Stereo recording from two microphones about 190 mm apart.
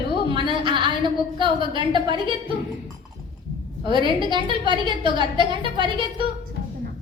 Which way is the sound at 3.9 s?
25° right (ahead or behind).